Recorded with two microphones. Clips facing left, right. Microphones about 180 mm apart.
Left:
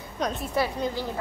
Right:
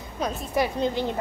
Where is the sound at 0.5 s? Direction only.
20° right (ahead or behind).